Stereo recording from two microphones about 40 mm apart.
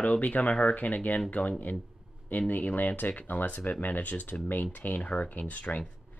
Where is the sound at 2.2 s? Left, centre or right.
Left.